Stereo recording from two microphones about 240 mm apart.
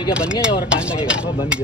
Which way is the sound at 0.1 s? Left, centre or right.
Centre.